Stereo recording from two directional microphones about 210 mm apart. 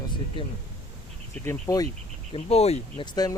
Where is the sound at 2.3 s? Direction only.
30° left (ahead or behind).